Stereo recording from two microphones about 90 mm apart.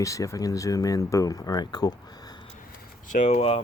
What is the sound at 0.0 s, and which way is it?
Speech, 35° left (ahead or behind).